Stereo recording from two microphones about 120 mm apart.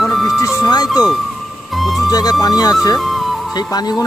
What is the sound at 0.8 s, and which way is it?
Speech, centre (ahead or behind).